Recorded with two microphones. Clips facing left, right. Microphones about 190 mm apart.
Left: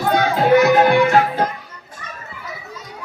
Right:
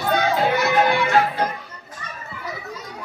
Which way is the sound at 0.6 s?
45° left (ahead or behind).